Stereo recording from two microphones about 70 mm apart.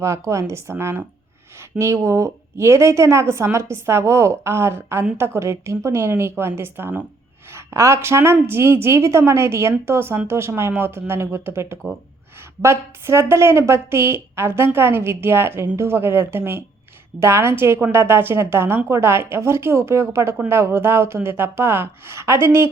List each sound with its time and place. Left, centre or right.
0.0 s a woman's voice: right
7.5 s a woman's voice: right